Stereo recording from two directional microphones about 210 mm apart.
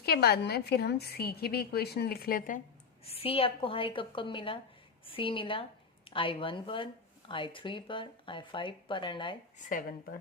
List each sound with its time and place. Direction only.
0.0 s a woman's voice: 50° left (ahead or behind)
3.0 s speech: 30° left (ahead or behind)
9.6 s speech: 40° left (ahead or behind)